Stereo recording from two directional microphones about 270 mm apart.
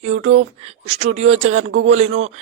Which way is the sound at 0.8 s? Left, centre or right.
Right.